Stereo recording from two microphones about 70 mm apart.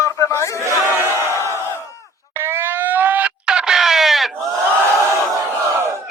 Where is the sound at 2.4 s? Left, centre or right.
Right.